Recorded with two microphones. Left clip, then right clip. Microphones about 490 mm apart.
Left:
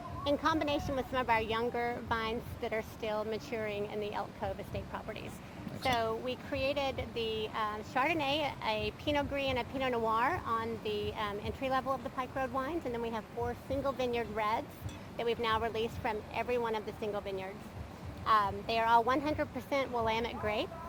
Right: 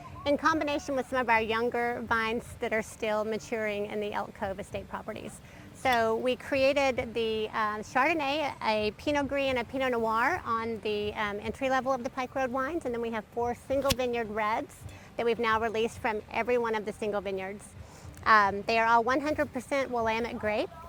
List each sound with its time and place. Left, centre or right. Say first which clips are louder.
0.3 s a woman's voice: right 4 dB; right
5.8 s a woman's voice: right 7 dB; right